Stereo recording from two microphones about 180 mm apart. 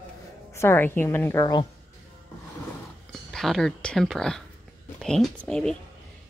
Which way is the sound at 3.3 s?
Centre (ahead or behind).